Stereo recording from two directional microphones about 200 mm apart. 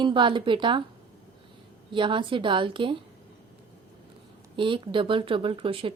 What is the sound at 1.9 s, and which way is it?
Speech, 25° right (ahead or behind).